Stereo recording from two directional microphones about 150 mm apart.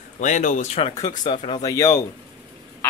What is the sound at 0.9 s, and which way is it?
Speech, 25° left (ahead or behind).